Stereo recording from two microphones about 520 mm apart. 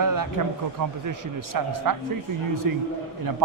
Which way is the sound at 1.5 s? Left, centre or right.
Right.